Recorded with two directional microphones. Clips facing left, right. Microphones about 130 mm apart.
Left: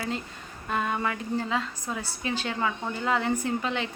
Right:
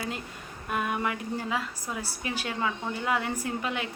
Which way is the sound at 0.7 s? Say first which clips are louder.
Left 1 dB; 15° right (ahead or behind).